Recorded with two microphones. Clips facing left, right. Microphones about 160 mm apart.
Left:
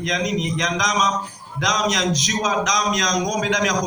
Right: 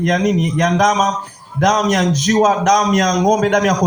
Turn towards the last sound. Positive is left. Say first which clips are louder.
# right 8 dB
turn(degrees=-55)  # may be behind; listen again after turning